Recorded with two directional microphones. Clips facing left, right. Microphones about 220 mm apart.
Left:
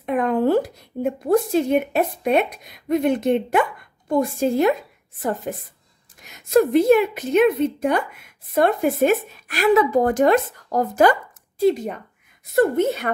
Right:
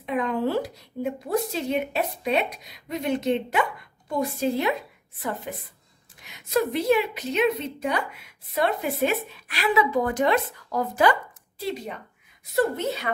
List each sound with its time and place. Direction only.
0.0 s a woman's voice: 50° left (ahead or behind)